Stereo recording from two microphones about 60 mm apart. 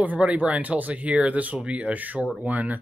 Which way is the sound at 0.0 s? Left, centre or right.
Right.